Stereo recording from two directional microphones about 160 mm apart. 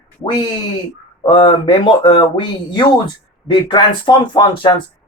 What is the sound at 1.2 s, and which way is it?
Speech, 30° left (ahead or behind).